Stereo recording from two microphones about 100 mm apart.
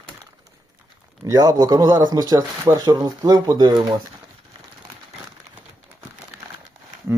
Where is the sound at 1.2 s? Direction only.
40° right (ahead or behind).